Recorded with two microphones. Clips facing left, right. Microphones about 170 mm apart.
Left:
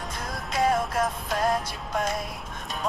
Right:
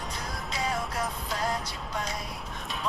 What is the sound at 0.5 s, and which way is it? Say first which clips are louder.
Music: left 8 dB; 50° left (ahead or behind).